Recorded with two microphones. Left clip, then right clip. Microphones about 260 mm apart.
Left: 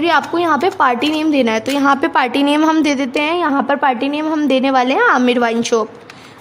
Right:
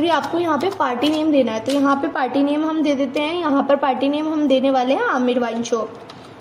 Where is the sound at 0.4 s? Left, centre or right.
Left.